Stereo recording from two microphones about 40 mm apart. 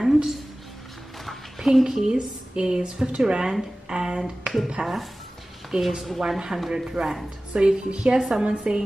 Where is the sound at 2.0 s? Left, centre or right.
Right.